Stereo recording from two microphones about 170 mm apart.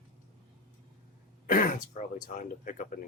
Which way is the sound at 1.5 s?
50° left (ahead or behind).